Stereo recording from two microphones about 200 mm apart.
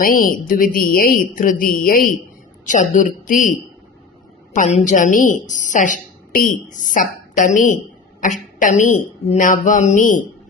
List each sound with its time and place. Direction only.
0.0 s a woman's voice: 45° left (ahead or behind)